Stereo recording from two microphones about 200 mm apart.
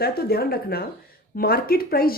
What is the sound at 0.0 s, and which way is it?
A woman's voice, 50° left (ahead or behind).